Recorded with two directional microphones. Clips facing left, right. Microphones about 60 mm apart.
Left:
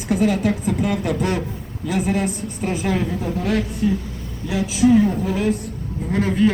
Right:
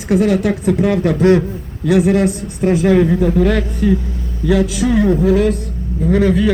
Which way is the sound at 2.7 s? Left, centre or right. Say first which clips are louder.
Right 10 dB; right.